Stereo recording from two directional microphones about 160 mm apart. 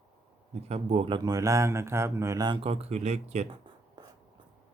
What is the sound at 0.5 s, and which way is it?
Speech, 40° right (ahead or behind).